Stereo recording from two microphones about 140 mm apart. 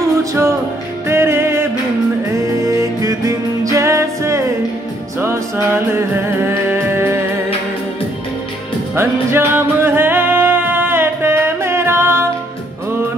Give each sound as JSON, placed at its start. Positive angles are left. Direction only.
{"t": 0.2, "sound": "music", "side_deg": -20}
{"t": 8.9, "sound": "music", "side_deg": -15}